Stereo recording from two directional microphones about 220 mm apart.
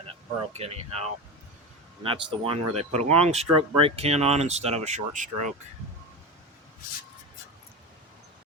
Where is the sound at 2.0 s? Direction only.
25° right (ahead or behind).